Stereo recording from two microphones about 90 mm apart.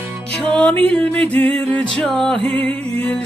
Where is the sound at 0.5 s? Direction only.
15° left (ahead or behind).